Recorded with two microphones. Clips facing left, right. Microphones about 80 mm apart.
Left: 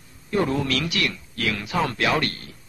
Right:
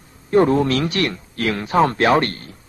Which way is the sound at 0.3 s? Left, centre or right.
Right.